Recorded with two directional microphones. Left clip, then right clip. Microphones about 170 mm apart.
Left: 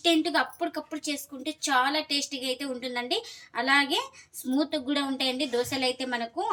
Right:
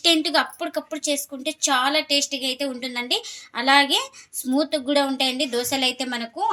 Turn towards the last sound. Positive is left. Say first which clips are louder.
# right 4 dB
turn(degrees=-50)  # may be behind; listen again after turning